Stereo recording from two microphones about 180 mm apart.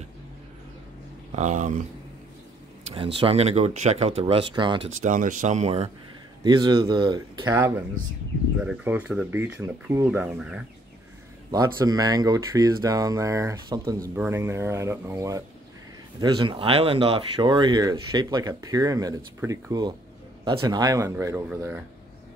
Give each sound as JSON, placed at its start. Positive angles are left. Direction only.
{"t": 1.3, "sound": "speech", "side_deg": -40}
{"t": 2.9, "sound": "speech", "side_deg": -30}
{"t": 5.0, "sound": "speech", "side_deg": -45}
{"t": 6.4, "sound": "speech", "side_deg": -25}
{"t": 11.5, "sound": "speech", "side_deg": -20}